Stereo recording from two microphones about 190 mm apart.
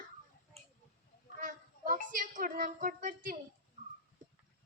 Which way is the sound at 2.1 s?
45° right (ahead or behind).